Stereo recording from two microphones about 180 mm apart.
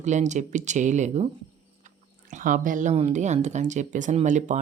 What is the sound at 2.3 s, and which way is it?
A woman's voice, 45° right (ahead or behind).